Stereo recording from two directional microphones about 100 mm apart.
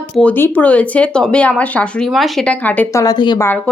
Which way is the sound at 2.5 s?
15° left (ahead or behind).